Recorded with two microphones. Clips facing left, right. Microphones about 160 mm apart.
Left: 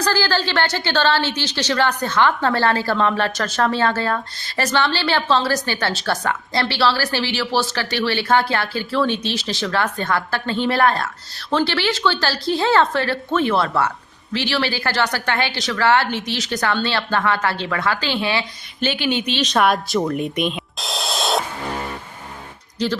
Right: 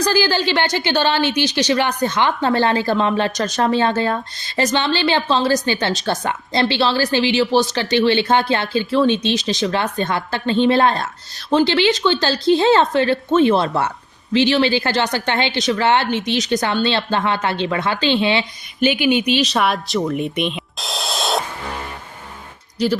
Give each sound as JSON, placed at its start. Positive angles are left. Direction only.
{"t": 0.0, "sound": "a woman's voice", "side_deg": -15}
{"t": 18.8, "sound": "speech", "side_deg": -10}
{"t": 22.8, "sound": "speech", "side_deg": -10}